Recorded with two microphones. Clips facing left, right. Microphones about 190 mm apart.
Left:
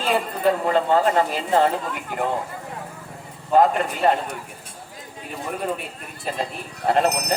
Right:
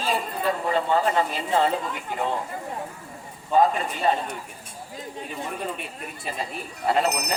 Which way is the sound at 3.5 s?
60° left (ahead or behind).